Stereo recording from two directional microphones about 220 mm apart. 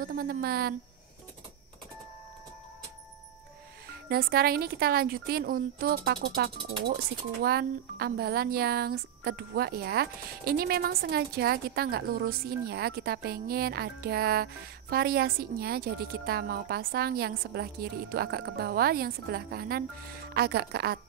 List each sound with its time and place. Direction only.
0.0 s speech: 40° right (ahead or behind)
3.9 s speech: 45° right (ahead or behind)